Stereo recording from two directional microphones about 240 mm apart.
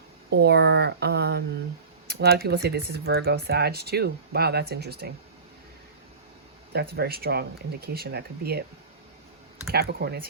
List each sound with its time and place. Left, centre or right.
0.3 s speech: right
6.7 s speech: right
9.7 s speech: right